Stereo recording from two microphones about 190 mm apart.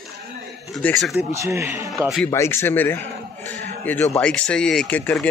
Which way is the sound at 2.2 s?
15° left (ahead or behind).